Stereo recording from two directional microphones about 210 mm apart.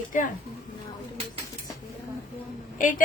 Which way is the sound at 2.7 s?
40° left (ahead or behind).